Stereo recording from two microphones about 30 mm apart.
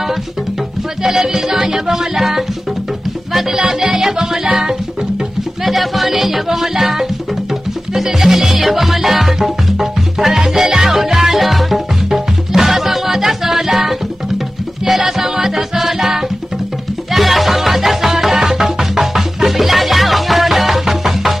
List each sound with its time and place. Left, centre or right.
1.0 s music: centre
3.5 s music: centre
5.6 s music: centre
11.4 s music: centre